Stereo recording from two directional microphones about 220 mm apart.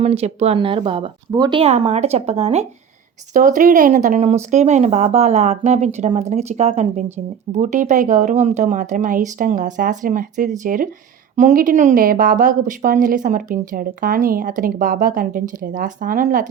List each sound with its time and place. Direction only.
0.0 s a woman's voice: 30° right (ahead or behind)